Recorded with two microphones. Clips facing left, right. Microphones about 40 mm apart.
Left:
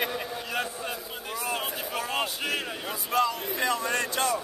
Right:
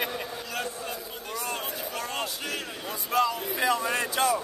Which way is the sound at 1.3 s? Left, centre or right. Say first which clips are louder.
Left 2 dB; centre.